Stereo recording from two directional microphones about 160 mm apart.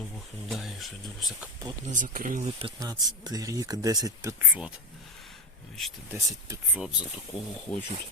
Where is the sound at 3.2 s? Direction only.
20° right (ahead or behind).